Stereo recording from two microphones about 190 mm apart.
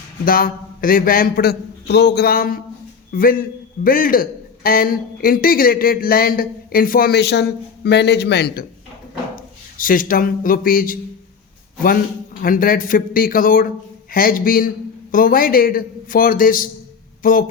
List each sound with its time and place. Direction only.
0.3 s a man's voice: 50° left (ahead or behind)
9.3 s speech: 45° left (ahead or behind)
12.4 s a man's voice: 45° left (ahead or behind)